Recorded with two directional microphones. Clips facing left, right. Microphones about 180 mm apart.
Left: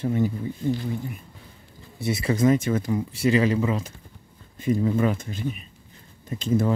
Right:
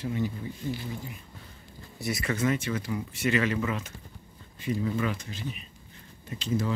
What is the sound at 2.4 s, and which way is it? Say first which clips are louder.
Speech: left 9 dB; 40° left (ahead or behind).